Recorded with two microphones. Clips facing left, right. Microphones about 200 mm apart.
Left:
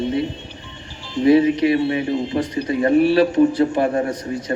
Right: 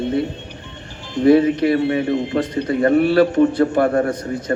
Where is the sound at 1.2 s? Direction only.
50° right (ahead or behind).